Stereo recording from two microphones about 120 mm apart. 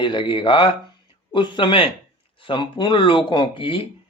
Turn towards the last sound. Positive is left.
turn(degrees=45)  # may be behind; listen again after turning